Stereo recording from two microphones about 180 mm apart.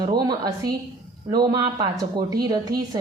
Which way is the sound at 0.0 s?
20° right (ahead or behind).